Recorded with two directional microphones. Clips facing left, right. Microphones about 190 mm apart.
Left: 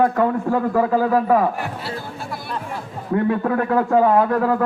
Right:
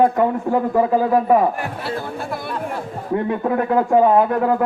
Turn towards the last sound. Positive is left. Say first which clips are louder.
# right 1 dB
turn(degrees=-20)  # may be behind; listen again after turning